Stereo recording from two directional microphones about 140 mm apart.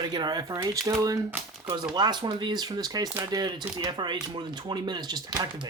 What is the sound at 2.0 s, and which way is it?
Speech, 30° right (ahead or behind).